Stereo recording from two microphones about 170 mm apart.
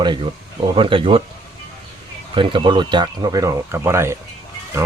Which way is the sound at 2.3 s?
30° right (ahead or behind).